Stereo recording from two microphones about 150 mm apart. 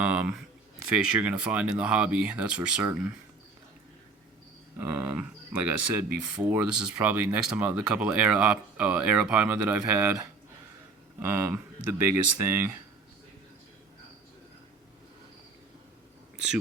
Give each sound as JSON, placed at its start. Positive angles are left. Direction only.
{"t": 0.0, "sound": "speech", "side_deg": -10}
{"t": 4.8, "sound": "speech", "side_deg": -10}
{"t": 11.2, "sound": "speech", "side_deg": -15}